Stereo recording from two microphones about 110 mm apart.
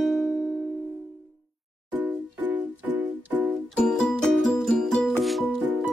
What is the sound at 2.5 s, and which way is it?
Music, 15° right (ahead or behind).